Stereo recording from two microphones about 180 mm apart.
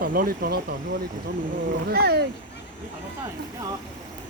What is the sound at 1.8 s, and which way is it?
Speech, 60° right (ahead or behind).